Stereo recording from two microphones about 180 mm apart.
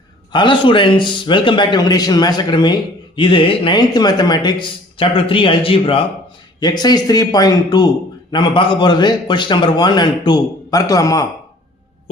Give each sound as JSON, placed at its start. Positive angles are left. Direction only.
{"t": 0.3, "sound": "a man's voice", "side_deg": 25}